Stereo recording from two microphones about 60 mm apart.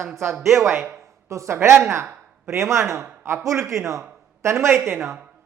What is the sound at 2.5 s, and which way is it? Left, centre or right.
A man's voice, right.